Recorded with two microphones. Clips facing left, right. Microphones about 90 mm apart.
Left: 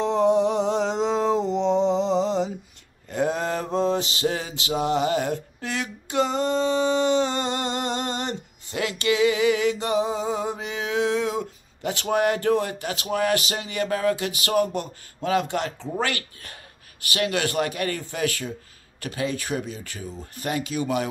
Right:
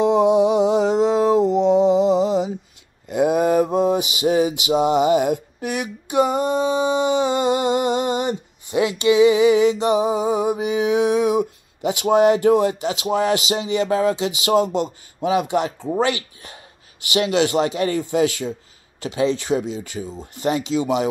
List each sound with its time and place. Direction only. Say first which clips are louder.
0.0 s mantra: right 5 dB; 15° right (ahead or behind)
17.0 s speech: right 6 dB; 20° right (ahead or behind)